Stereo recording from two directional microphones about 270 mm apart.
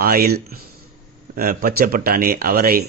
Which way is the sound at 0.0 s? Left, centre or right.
Right.